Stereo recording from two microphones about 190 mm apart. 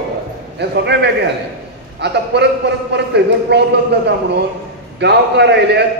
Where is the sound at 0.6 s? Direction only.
65° right (ahead or behind).